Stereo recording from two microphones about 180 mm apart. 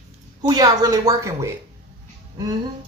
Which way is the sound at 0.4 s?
20° right (ahead or behind).